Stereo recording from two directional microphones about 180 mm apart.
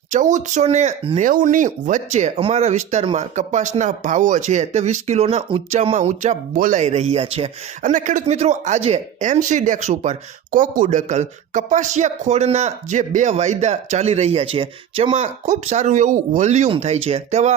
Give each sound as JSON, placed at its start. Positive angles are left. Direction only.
{"t": 0.1, "sound": "speech", "side_deg": -45}
{"t": 1.3, "sound": "speech", "side_deg": -45}